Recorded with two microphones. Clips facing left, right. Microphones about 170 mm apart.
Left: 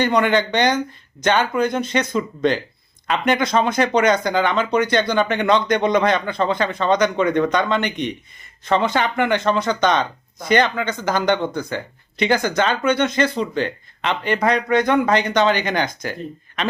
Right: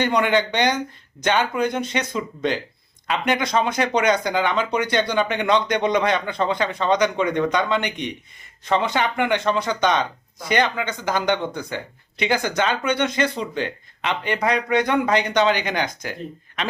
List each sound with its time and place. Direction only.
0.0 s speech: 15° right (ahead or behind)
7.8 s a man's voice: 55° left (ahead or behind)
8.6 s speech: 15° right (ahead or behind)